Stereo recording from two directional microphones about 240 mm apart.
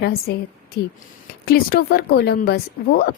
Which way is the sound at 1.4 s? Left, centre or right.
Left.